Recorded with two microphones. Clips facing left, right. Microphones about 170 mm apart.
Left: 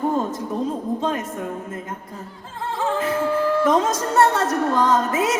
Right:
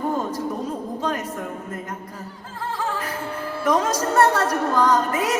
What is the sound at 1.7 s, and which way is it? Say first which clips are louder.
Music: even; 25° left (ahead or behind).